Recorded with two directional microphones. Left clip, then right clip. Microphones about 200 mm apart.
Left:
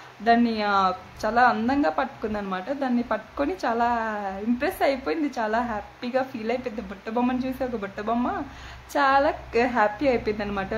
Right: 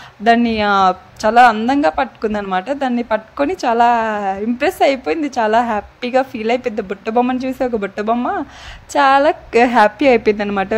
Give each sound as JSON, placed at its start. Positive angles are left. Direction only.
{"t": 0.2, "sound": "a woman's voice", "side_deg": -35}